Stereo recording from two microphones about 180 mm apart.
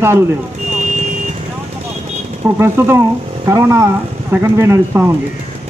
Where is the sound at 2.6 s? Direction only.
15° right (ahead or behind).